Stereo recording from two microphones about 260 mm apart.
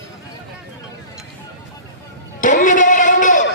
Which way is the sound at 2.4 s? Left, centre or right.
Left.